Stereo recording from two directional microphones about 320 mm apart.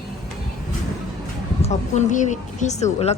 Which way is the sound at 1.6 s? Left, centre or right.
Left.